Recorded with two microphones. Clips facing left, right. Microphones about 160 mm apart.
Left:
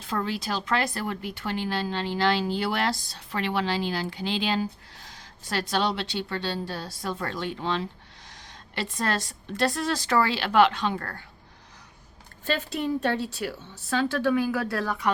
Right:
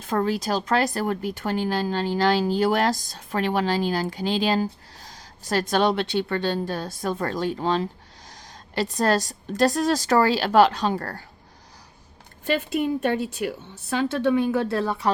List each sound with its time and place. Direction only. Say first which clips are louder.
0.0 s a woman's voice: right 6 dB; 45° right (ahead or behind)
12.5 s a woman's voice: right 4 dB; 15° right (ahead or behind); by 15.1 s 30° right (ahead or behind)